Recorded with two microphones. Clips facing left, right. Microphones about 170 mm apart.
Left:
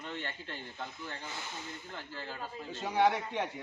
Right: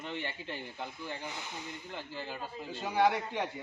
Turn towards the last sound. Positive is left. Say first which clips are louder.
# even
turn(degrees=0)  # may be behind; listen again after turning